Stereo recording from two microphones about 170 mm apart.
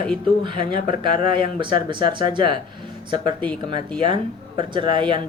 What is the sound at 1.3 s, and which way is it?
Speech, 30° right (ahead or behind).